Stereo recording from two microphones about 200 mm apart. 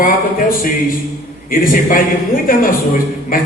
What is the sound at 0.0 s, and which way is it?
A man's voice, 45° left (ahead or behind).